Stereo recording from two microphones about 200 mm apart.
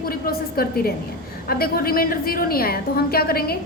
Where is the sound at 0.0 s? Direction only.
50° left (ahead or behind).